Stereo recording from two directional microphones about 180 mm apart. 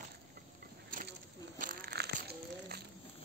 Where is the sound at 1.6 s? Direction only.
50° right (ahead or behind).